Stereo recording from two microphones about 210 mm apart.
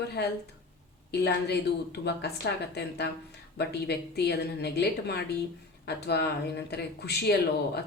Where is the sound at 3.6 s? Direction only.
50° left (ahead or behind).